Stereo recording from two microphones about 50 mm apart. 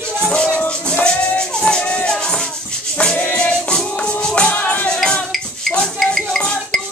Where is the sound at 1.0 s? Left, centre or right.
Centre.